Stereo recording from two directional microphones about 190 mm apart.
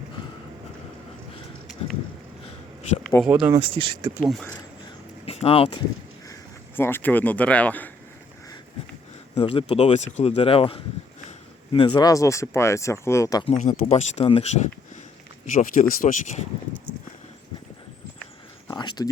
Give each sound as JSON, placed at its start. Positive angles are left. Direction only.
{"t": 3.2, "sound": "speech", "side_deg": -10}
{"t": 3.6, "sound": "speech", "side_deg": -30}
{"t": 4.2, "sound": "speech", "side_deg": 5}
{"t": 5.2, "sound": "speech", "side_deg": 30}
{"t": 6.7, "sound": "speech", "side_deg": 10}
{"t": 9.3, "sound": "speech", "side_deg": 30}
{"t": 13.6, "sound": "speech", "side_deg": 40}
{"t": 18.7, "sound": "speech", "side_deg": 20}